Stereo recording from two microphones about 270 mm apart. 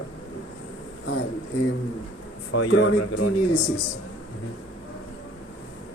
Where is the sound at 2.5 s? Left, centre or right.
Left.